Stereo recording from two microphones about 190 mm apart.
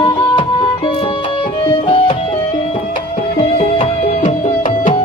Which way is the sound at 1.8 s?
25° left (ahead or behind).